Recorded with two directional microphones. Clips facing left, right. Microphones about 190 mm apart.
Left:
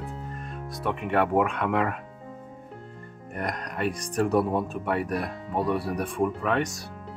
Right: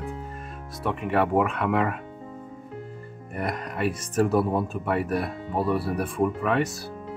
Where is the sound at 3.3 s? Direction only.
5° right (ahead or behind).